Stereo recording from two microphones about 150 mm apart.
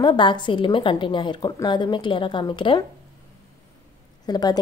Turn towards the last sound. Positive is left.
turn(degrees=25)  # may be behind; listen again after turning